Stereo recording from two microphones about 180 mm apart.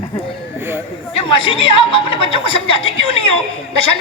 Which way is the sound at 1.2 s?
30° left (ahead or behind).